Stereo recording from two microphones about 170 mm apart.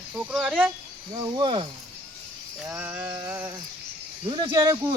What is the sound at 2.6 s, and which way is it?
Speech, 10° right (ahead or behind).